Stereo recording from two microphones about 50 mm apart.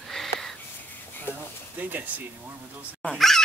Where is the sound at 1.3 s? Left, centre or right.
Left.